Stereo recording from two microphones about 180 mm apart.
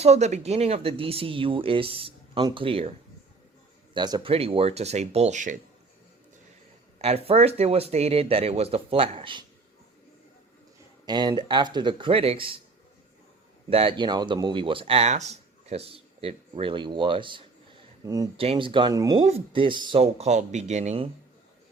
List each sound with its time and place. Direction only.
0.0 s speech: 35° right (ahead or behind)
3.9 s speech: 25° right (ahead or behind); by 5.5 s 45° right (ahead or behind)
7.3 s speech: 35° right (ahead or behind)
11.0 s speech: 25° right (ahead or behind)
13.7 s speech: 30° right (ahead or behind)
18.3 s speech: 30° right (ahead or behind)
19.2 s speech: 30° right (ahead or behind)